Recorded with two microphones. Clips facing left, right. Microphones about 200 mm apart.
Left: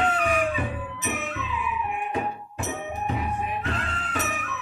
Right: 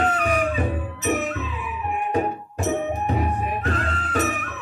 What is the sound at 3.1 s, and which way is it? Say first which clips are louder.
Music: right 4 dB; 45° right (ahead or behind).